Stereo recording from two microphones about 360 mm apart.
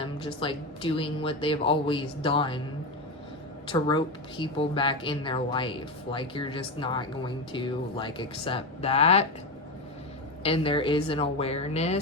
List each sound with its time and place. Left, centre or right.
0.0 s speech: centre
3.7 s speech: centre
10.4 s speech: centre